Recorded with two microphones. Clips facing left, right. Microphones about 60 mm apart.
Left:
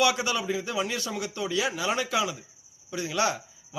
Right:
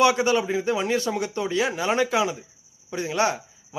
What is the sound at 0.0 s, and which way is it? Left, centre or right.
A man's voice, right.